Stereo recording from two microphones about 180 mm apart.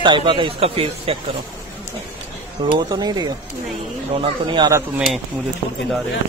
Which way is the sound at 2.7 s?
25° right (ahead or behind).